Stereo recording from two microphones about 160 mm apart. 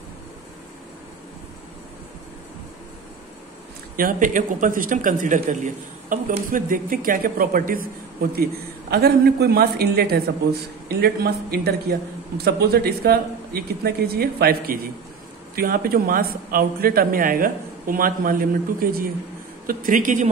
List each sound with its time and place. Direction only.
3.9 s a man's voice: 60° right (ahead or behind)
8.9 s a man's voice: 85° right; by 20.2 s 55° right (ahead or behind)